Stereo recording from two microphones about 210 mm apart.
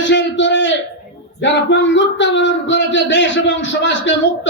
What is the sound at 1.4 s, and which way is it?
Speech, 60° left (ahead or behind).